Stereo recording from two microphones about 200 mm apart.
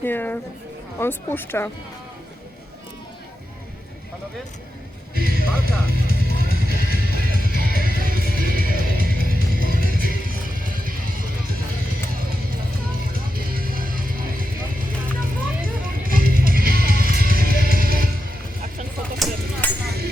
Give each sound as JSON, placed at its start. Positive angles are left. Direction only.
{"t": 0.0, "sound": "speech", "side_deg": 10}
{"t": 5.1, "sound": "music", "side_deg": -50}
{"t": 13.1, "sound": "vehicle", "side_deg": -45}
{"t": 15.2, "sound": "music", "side_deg": -45}
{"t": 19.2, "sound": "a sound", "side_deg": 0}
{"t": 19.6, "sound": "vehicle", "side_deg": 10}